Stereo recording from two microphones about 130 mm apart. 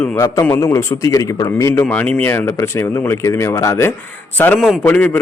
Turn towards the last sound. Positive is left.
turn(degrees=15)  # may be behind; listen again after turning